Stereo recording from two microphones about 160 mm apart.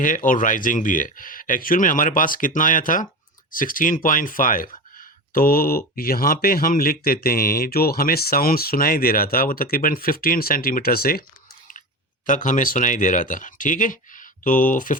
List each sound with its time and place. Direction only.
0.0 s speech: 55° left (ahead or behind)
12.2 s speech: 55° left (ahead or behind)